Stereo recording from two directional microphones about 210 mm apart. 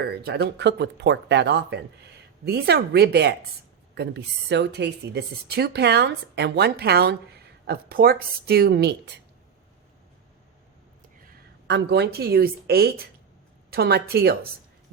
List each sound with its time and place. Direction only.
0.0 s a woman's voice: 50° right (ahead or behind)
11.2 s a woman's voice: 45° right (ahead or behind)